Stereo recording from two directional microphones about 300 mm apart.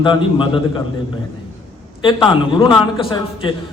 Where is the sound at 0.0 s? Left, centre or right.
Centre.